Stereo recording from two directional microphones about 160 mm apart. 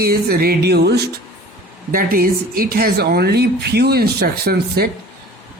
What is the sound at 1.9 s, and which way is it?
A woman's voice, 60° right (ahead or behind).